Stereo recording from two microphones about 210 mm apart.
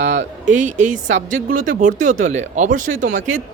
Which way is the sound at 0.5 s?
35° right (ahead or behind).